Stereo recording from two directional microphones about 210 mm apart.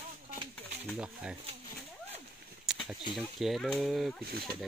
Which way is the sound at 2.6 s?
Centre (ahead or behind).